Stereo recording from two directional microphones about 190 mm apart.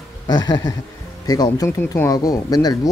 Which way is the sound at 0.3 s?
20° left (ahead or behind).